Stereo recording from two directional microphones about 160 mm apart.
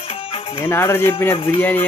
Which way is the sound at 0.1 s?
40° left (ahead or behind).